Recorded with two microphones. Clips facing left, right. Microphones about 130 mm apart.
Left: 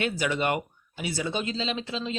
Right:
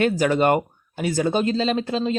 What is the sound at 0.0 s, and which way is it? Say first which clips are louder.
Speech: right 8 dB; 45° right (ahead or behind).